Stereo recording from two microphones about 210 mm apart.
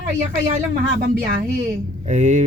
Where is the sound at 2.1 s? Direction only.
35° right (ahead or behind).